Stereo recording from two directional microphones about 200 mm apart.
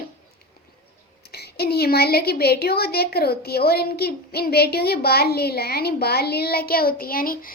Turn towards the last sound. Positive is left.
turn(degrees=45)  # may be behind; listen again after turning